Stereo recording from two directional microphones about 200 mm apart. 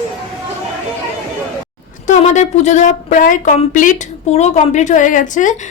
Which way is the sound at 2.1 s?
35° left (ahead or behind).